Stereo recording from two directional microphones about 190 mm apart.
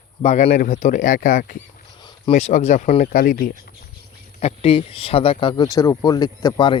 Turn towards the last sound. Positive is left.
turn(degrees=20)  # may be behind; listen again after turning